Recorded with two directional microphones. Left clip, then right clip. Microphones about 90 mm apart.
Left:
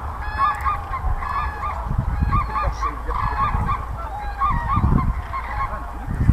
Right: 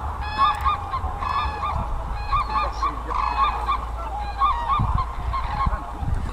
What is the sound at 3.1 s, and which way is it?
Goose, 20° right (ahead or behind).